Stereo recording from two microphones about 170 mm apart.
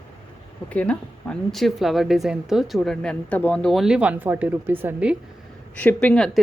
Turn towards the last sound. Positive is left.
turn(degrees=5)  # may be behind; listen again after turning